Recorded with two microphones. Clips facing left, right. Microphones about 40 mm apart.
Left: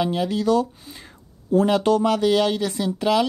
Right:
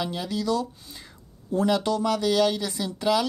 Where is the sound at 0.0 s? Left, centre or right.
Left.